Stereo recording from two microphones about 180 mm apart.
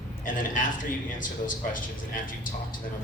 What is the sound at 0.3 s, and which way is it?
A man's voice, 45° left (ahead or behind).